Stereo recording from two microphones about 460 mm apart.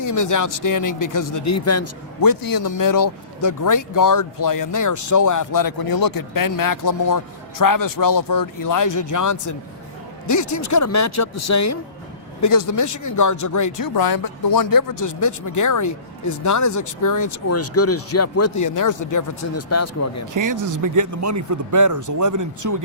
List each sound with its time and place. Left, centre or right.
0.0 s speech: left
2.2 s speech: left
20.3 s a man's voice: right